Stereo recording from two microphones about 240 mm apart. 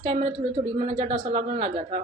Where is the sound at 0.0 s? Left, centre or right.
Right.